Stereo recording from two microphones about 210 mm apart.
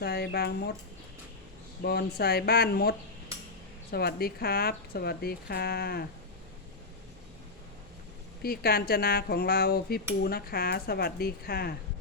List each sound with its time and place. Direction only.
0.0 s speech: 50° left (ahead or behind)
1.8 s speech: 50° left (ahead or behind)
3.9 s speech: 50° left (ahead or behind)
8.4 s speech: 45° left (ahead or behind)